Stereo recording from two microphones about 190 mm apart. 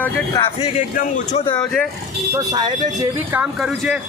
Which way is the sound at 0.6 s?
40° left (ahead or behind).